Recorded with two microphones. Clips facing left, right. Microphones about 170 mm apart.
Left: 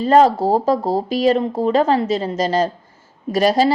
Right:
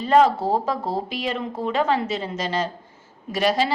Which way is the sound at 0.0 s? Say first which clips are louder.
Left 4 dB; 40° left (ahead or behind).